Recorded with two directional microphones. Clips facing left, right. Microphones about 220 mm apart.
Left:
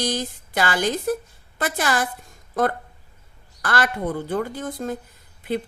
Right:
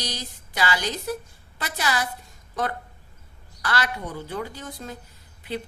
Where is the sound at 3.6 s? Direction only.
50° left (ahead or behind).